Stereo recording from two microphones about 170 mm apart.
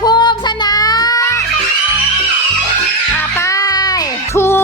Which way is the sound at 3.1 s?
15° left (ahead or behind).